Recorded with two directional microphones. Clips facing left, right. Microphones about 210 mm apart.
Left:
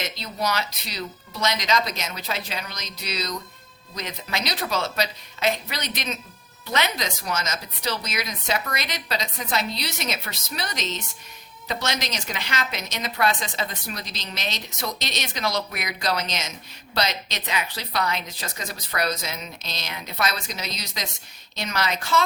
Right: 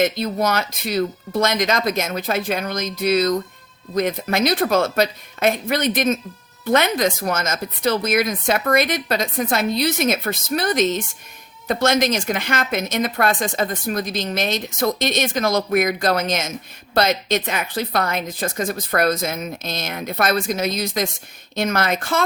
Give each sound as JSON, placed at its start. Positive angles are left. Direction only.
{"t": 0.0, "sound": "speech", "side_deg": -50}